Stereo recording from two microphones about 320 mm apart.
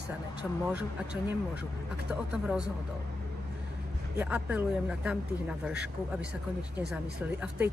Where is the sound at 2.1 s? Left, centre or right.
Centre.